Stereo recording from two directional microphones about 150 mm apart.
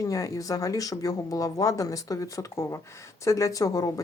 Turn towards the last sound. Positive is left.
turn(degrees=25)  # may be behind; listen again after turning